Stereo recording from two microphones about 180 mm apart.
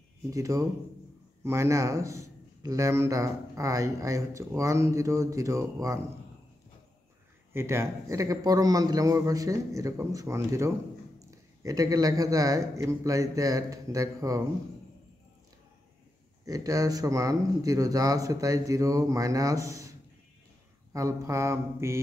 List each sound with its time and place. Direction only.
0.3 s a man's voice: 20° right (ahead or behind)
7.5 s a man's voice: 15° right (ahead or behind)
16.4 s a man's voice: 20° right (ahead or behind)